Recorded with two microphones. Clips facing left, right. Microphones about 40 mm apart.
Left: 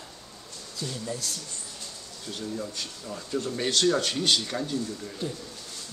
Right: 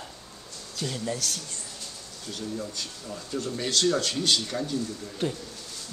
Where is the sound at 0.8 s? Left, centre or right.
Right.